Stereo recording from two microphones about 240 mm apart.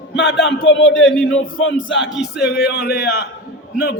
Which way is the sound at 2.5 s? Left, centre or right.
Left.